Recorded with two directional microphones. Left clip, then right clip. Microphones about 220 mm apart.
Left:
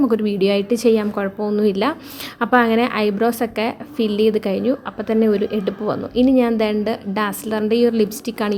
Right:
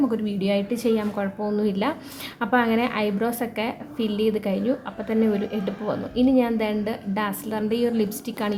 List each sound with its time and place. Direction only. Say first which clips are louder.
0.1 s a woman's voice: left 7 dB; 30° left (ahead or behind)